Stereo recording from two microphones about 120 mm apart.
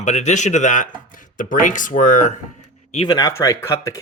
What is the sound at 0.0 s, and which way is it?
Speech, 75° left (ahead or behind).